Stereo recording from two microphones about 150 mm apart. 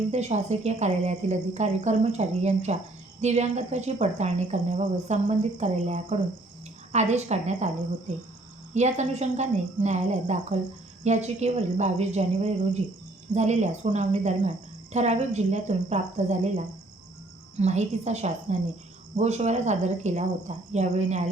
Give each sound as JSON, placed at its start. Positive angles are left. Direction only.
{"t": 0.1, "sound": "speech", "side_deg": -50}
{"t": 8.7, "sound": "speech", "side_deg": -50}